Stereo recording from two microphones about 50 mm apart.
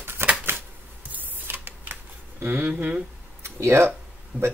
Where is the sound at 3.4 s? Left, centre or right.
Right.